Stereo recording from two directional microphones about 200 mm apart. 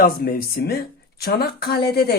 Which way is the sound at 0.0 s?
50° left (ahead or behind).